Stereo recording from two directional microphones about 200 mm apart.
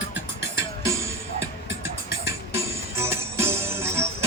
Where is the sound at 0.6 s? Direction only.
15° right (ahead or behind).